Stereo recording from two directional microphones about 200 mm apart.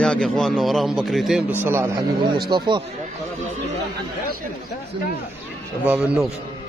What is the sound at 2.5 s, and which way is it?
Speech, 25° right (ahead or behind).